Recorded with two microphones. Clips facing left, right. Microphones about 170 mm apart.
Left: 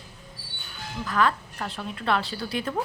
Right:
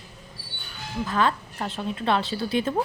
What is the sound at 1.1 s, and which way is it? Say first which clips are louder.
A woman's voice: even; 25° right (ahead or behind).